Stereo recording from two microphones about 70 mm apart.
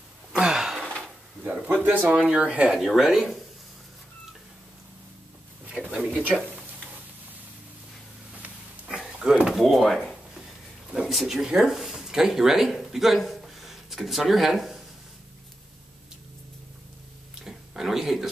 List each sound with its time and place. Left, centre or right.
0.3 s gasp: centre
1.9 s speech: right
2.8 s speech: centre
5.9 s speech: centre
8.8 s a sound: centre
9.2 s a sound: centre
9.5 s drawer open or close: centre
10.9 s speech: centre
17.4 s a sound: centre